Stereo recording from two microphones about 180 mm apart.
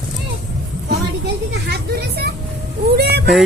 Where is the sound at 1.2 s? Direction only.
65° right (ahead or behind).